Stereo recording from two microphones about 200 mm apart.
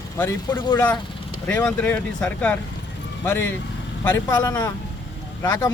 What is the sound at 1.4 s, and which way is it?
Speech, 10° left (ahead or behind).